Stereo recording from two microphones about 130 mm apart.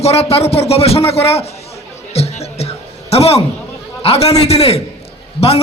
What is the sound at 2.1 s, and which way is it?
Music, 55° left (ahead or behind).